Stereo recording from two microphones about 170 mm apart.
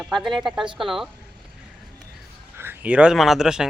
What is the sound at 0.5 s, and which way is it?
Speech, 30° right (ahead or behind).